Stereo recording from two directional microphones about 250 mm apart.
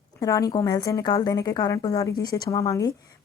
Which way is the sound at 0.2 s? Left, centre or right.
Centre.